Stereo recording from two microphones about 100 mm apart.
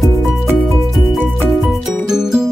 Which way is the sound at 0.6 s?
Centre (ahead or behind).